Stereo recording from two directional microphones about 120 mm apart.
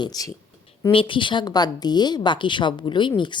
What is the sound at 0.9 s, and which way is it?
A woman's voice, 45° left (ahead or behind).